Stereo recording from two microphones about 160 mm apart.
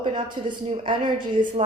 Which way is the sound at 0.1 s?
30° right (ahead or behind).